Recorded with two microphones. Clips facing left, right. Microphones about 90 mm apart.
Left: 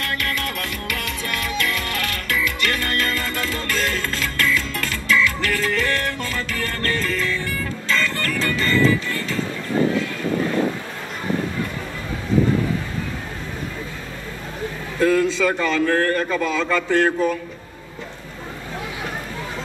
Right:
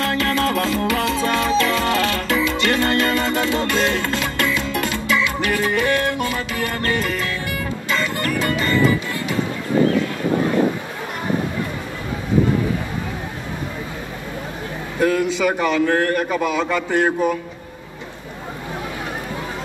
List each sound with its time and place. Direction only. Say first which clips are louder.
0.0 s music: right 6 dB; 25° right (ahead or behind)
15.0 s a man's voice: left 1 dB; 15° right (ahead or behind)